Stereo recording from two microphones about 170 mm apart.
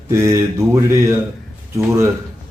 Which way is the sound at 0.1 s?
15° right (ahead or behind).